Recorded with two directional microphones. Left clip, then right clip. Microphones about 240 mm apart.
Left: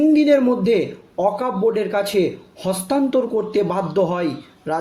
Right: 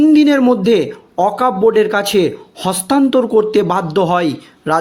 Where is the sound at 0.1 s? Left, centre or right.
Right.